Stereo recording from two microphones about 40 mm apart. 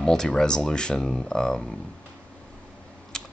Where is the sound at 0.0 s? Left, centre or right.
Centre.